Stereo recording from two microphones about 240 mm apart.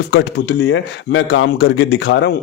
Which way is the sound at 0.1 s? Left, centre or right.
Left.